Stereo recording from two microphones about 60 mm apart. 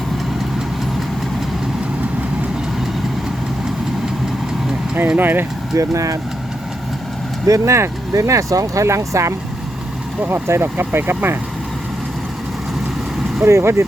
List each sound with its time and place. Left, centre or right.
5.1 s speech: right
5.7 s speech: right
7.4 s speech: right
10.2 s speech: right
13.4 s speech: right